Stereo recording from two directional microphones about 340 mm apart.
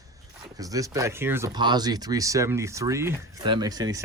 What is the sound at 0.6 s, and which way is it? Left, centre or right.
Speech, centre.